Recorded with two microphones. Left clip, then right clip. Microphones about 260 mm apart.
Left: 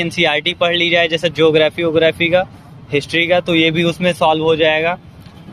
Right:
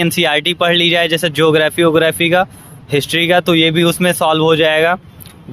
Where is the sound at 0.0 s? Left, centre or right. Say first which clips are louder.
Right 2 dB; right.